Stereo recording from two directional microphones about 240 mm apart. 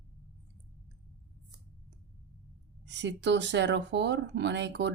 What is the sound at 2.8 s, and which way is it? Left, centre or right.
Speech, right.